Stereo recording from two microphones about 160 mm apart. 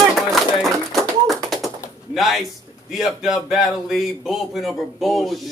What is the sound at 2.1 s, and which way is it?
A man's voice, centre (ahead or behind).